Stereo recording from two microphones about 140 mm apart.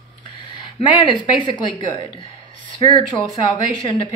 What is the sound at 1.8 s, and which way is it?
A woman's voice, 35° left (ahead or behind).